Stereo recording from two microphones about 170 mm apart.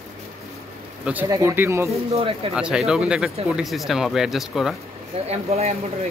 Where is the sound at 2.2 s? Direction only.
35° right (ahead or behind).